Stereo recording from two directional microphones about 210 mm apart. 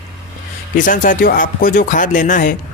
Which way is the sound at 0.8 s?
40° left (ahead or behind).